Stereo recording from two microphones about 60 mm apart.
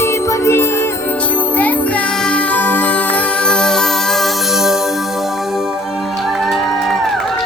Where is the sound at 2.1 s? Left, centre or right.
Centre.